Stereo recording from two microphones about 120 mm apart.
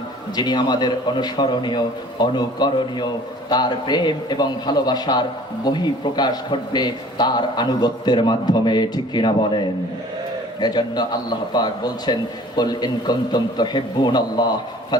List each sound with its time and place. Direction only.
0.3 s a man's voice: 35° left (ahead or behind)